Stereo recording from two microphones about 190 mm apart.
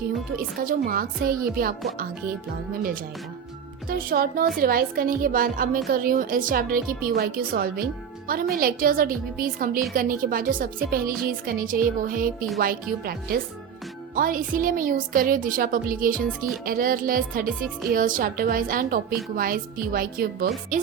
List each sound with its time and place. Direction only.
0.3 s a woman's voice: 50° right (ahead or behind)
3.8 s a woman's voice: 50° right (ahead or behind)